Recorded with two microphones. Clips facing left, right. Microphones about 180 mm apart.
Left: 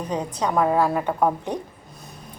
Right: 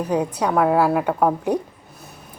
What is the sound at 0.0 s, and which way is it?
A woman's voice, 10° right (ahead or behind).